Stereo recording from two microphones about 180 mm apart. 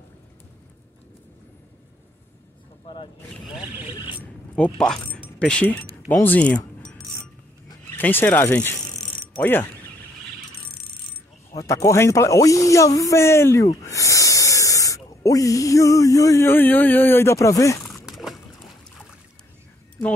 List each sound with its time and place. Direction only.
4.7 s speech: 5° left (ahead or behind)
8.0 s speech: 10° left (ahead or behind)
11.5 s speech: 20° left (ahead or behind)
17.8 s a sound: centre (ahead or behind)